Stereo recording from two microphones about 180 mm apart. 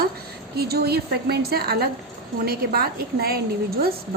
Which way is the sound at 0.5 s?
60° right (ahead or behind).